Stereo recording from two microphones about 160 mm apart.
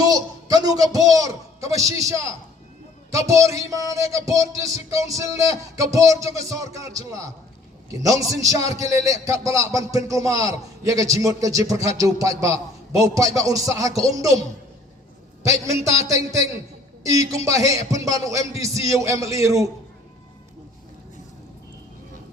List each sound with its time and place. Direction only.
0.0 s a man's voice: 25° right (ahead or behind)
15.4 s a man's voice: 20° right (ahead or behind)